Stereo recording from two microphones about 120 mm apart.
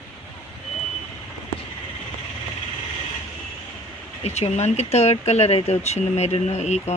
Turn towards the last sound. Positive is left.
turn(degrees=70)  # may be behind; listen again after turning